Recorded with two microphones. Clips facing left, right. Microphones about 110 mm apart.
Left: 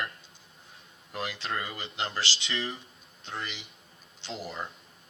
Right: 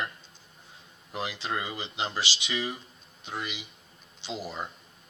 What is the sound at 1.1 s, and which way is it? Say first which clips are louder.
Speech: right 1 dB; 20° right (ahead or behind).